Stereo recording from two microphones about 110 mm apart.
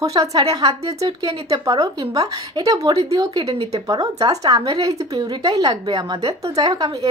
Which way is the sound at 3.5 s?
60° right (ahead or behind).